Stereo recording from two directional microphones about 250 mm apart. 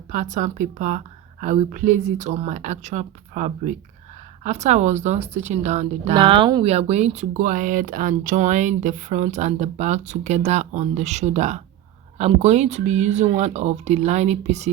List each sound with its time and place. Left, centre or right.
0.1 s speech: right